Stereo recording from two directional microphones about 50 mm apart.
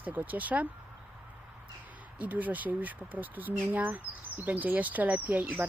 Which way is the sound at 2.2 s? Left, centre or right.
Right.